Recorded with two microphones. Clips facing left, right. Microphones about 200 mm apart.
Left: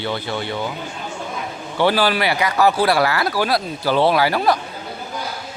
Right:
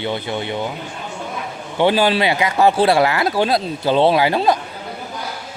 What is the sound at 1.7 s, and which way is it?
Speech, 20° right (ahead or behind).